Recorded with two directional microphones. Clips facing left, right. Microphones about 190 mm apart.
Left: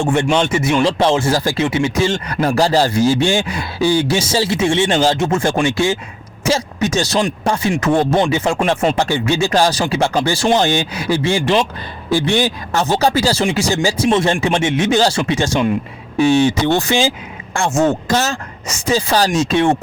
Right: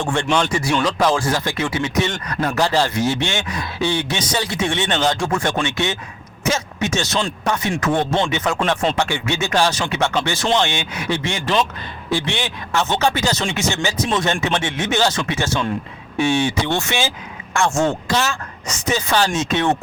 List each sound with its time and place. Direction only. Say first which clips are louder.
0.0 s speech: left 4 dB; 20° left (ahead or behind)
15.2 s speech: left 5 dB; 15° left (ahead or behind)
16.1 s speech: left 6 dB; 40° left (ahead or behind)
18.1 s speech: left 3 dB; 45° left (ahead or behind)
18.7 s speech: left 4 dB; 30° left (ahead or behind)